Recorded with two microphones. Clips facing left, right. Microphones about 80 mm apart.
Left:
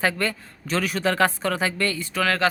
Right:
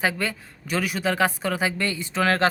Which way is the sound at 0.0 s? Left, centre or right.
Centre.